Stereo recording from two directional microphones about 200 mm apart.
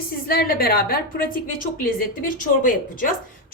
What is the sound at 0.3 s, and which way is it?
A woman's voice, 50° left (ahead or behind).